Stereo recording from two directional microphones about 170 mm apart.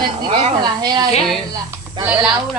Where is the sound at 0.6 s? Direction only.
25° right (ahead or behind).